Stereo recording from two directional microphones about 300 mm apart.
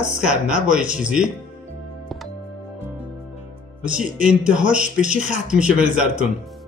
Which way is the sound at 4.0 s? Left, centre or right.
Centre.